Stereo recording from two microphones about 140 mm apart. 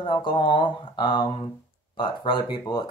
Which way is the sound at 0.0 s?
35° left (ahead or behind).